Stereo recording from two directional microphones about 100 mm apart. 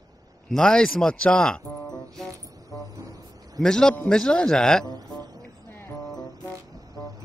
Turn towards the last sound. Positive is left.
turn(degrees=25)  # may be behind; listen again after turning